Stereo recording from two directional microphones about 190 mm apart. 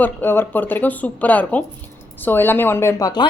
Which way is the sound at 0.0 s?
10° left (ahead or behind).